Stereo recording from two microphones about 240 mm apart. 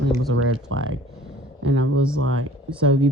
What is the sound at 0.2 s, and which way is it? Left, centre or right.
Speech, right.